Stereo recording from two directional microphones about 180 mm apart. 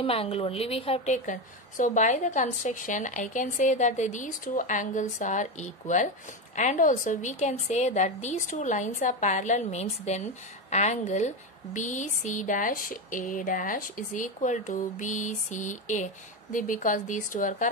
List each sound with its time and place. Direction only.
0.0 s a woman's voice: 30° left (ahead or behind); by 17.6 s 45° left (ahead or behind)